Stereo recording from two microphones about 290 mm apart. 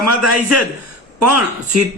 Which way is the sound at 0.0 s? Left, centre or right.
Right.